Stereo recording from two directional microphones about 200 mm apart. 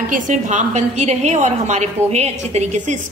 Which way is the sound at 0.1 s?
40° right (ahead or behind).